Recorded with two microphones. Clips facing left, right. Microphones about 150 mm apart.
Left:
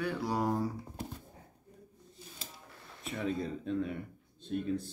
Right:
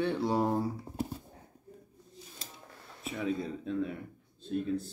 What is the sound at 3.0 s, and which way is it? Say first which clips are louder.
Speech: right 1 dB; centre (ahead or behind).